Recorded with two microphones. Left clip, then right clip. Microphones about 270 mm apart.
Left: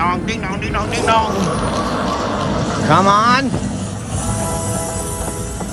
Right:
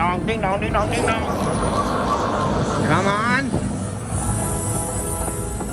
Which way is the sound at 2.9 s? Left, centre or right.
Right.